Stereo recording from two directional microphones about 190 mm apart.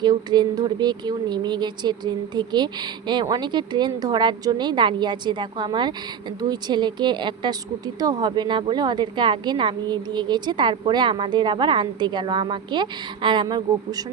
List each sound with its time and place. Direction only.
0.0 s speech: 20° right (ahead or behind)